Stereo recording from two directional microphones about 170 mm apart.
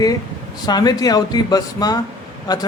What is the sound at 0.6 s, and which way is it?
A man's voice, 25° left (ahead or behind).